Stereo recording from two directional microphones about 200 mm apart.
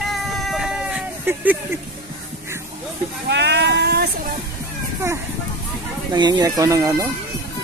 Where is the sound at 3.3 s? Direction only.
60° right (ahead or behind).